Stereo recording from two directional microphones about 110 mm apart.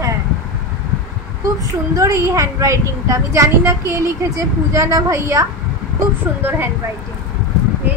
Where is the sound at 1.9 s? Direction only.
30° right (ahead or behind).